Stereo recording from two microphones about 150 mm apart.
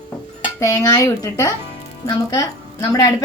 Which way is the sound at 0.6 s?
25° left (ahead or behind).